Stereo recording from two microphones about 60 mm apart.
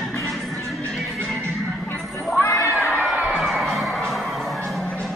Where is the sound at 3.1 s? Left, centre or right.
Right.